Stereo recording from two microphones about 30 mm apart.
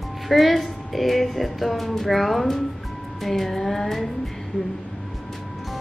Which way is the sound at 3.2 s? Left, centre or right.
Centre.